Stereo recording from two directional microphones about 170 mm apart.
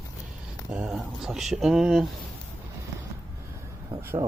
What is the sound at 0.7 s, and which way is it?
Speech, 5° right (ahead or behind).